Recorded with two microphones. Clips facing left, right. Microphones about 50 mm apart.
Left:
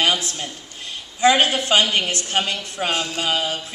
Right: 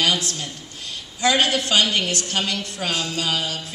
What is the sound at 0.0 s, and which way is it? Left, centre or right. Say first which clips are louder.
A man's voice: left 1 dB; left.